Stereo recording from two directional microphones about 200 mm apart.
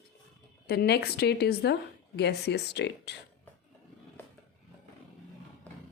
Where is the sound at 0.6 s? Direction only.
50° left (ahead or behind).